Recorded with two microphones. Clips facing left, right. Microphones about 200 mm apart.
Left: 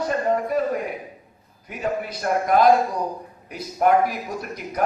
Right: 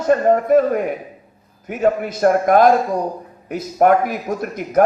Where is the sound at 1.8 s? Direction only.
45° right (ahead or behind).